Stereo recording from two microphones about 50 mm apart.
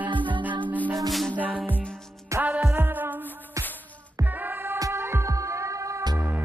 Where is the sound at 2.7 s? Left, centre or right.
Right.